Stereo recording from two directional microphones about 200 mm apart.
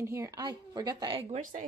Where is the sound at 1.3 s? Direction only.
40° right (ahead or behind).